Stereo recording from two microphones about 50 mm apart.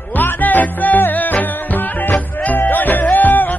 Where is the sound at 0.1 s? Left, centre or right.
Left.